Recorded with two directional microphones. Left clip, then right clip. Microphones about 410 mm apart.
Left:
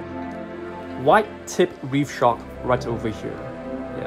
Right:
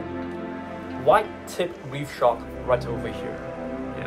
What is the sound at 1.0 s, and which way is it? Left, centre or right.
Speech, centre.